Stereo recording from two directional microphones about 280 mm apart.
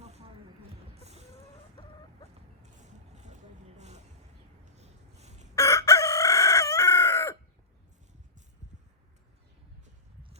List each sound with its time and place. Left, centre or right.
0.9 s music: right
2.8 s a sound: right
5.5 s chicken: centre